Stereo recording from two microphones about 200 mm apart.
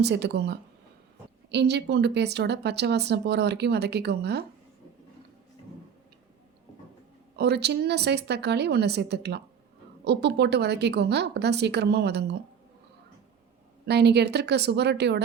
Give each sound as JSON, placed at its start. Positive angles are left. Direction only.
{"t": 0.0, "sound": "speech", "side_deg": -55}
{"t": 7.3, "sound": "speech", "side_deg": -55}
{"t": 13.8, "sound": "speech", "side_deg": -55}